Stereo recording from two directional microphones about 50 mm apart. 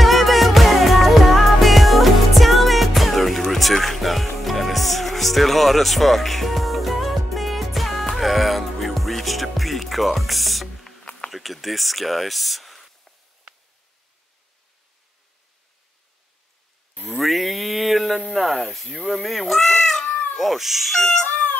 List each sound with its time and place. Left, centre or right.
0.0 s music: centre
11.2 s a sound: centre
17.0 s speech: centre
20.1 s cat: left
20.3 s speech: centre
21.2 s a sound: left